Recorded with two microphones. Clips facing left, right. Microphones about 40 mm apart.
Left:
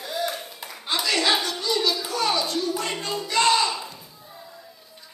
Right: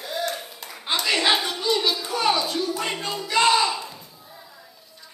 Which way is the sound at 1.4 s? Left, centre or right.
Centre.